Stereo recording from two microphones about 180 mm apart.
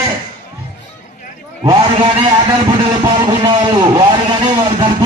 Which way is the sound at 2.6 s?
25° right (ahead or behind).